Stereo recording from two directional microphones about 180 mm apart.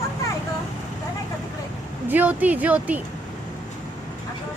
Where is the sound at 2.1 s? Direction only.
10° right (ahead or behind).